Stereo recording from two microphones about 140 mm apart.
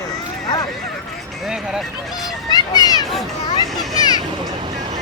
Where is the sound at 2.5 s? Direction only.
30° left (ahead or behind).